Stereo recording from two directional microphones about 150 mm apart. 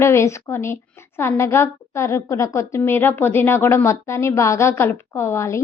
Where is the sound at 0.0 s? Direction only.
15° left (ahead or behind).